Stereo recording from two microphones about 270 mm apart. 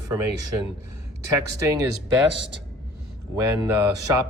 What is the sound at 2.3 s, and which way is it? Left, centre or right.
Speech, right.